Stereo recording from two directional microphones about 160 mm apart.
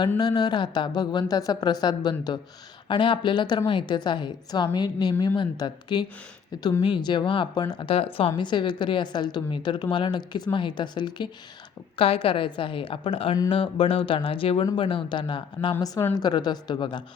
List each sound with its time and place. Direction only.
0.2 s a woman's voice: 25° left (ahead or behind)
13.3 s a woman's voice: 20° left (ahead or behind)
13.6 s a woman's voice: 35° left (ahead or behind)
15.7 s a woman's voice: 15° left (ahead or behind)